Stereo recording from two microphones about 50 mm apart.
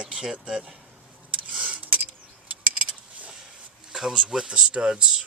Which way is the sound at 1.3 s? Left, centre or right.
Right.